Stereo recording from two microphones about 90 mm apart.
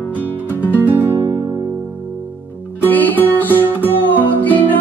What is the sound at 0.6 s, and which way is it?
Music, 25° left (ahead or behind).